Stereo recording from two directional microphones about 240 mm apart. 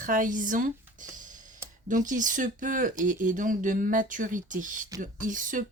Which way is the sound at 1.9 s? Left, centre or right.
Right.